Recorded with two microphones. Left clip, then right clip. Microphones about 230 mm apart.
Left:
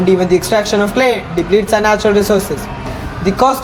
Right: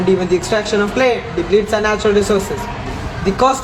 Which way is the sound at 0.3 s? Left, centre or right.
Centre.